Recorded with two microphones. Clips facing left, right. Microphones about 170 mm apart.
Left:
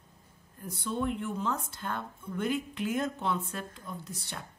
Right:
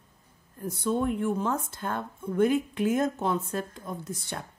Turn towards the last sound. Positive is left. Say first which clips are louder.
# right 6 dB
turn(degrees=-50)  # may be behind; listen again after turning